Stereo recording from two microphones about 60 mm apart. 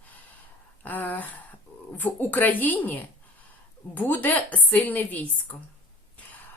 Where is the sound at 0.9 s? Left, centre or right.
Left.